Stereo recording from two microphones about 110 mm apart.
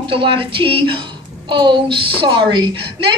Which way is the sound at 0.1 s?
50° right (ahead or behind).